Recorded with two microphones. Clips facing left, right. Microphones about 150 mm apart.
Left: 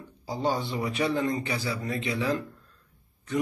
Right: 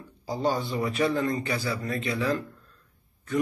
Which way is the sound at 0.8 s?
15° left (ahead or behind).